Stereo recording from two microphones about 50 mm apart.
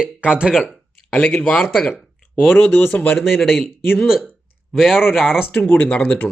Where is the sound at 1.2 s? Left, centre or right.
Centre.